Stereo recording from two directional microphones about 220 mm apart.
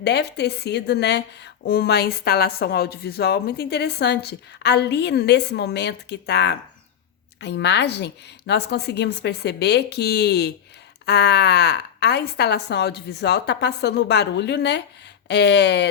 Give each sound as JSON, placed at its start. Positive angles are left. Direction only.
{"t": 0.0, "sound": "a woman's voice", "side_deg": 50}